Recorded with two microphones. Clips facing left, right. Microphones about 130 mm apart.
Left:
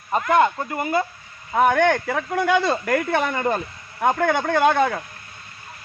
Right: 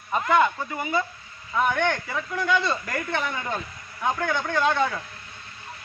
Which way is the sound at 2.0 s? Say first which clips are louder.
Left 5 dB; 75° left (ahead or behind).